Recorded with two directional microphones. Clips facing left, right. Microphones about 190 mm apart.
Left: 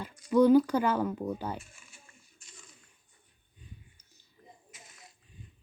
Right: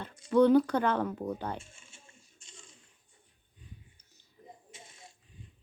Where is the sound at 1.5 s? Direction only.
25° right (ahead or behind).